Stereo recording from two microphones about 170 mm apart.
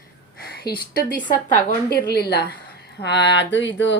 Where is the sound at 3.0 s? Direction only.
90° left.